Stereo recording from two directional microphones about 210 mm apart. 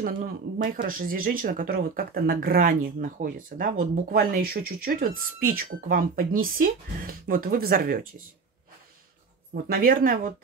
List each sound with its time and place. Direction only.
0.0 s speech: 40° right (ahead or behind)
9.5 s speech: 45° right (ahead or behind)